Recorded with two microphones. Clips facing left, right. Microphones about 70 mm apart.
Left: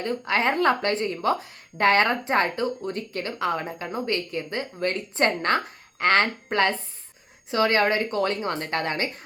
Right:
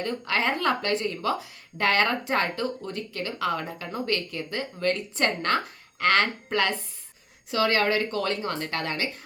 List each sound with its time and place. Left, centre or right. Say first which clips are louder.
0.0 s a woman's voice: left 3 dB; left